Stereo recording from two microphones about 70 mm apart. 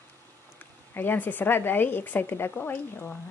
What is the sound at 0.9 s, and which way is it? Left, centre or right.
A woman's voice, left.